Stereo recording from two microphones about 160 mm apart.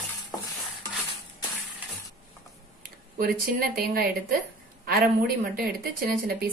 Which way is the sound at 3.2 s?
65° right (ahead or behind).